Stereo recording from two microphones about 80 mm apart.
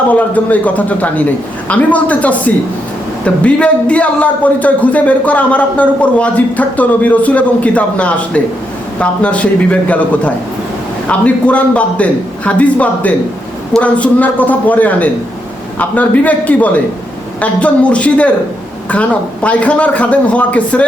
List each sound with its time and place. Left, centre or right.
0.1 s a man's voice: centre